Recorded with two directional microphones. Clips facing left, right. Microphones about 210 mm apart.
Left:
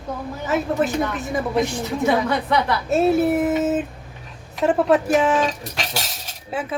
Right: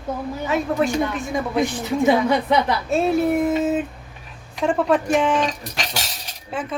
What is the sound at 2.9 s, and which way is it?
A woman's voice, centre (ahead or behind).